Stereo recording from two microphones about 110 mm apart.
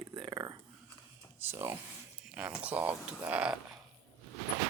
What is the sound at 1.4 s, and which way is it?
Speech, 20° right (ahead or behind).